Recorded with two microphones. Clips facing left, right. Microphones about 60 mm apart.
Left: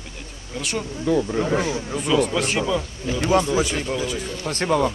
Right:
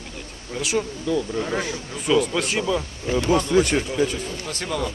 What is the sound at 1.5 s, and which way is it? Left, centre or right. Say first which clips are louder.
Speech: left 6 dB; centre.